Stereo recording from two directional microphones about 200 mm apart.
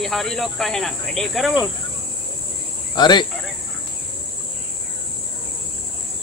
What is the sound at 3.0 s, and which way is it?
Speech, 20° left (ahead or behind).